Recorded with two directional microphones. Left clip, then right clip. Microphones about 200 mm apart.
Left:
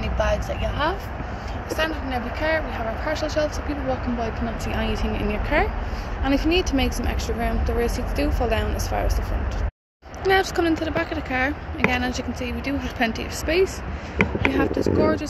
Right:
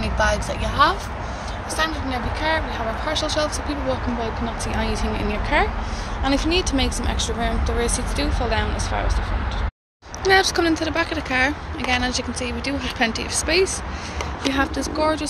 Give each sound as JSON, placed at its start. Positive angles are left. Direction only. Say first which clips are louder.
{"t": 0.0, "sound": "vehicle", "louder": "right 3 dB", "side_deg": -10}
{"t": 1.8, "sound": "speech", "louder": "right 2 dB", "side_deg": 5}
{"t": 3.1, "sound": "speech", "louder": "right 1 dB", "side_deg": -5}
{"t": 10.2, "sound": "speech", "louder": "right 3 dB", "side_deg": -10}
{"t": 14.5, "sound": "speech", "louder": "left 1 dB", "side_deg": -15}